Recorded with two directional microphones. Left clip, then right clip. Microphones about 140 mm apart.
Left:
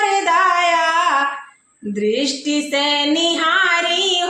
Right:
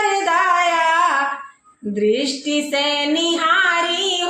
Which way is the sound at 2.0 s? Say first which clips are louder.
Even; 35° left (ahead or behind).